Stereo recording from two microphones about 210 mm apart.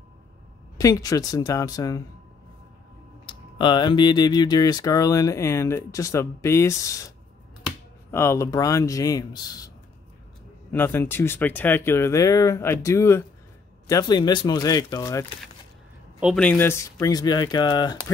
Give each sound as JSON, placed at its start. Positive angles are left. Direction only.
{"t": 0.7, "sound": "speech", "side_deg": 15}
{"t": 3.3, "sound": "speech", "side_deg": 20}
{"t": 8.1, "sound": "speech", "side_deg": 10}
{"t": 10.7, "sound": "speech", "side_deg": 10}
{"t": 16.2, "sound": "speech", "side_deg": 0}